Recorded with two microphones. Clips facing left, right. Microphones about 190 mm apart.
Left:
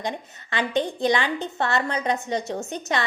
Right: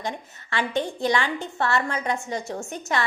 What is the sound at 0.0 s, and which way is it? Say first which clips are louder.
A woman's voice: left 2 dB; 20° left (ahead or behind).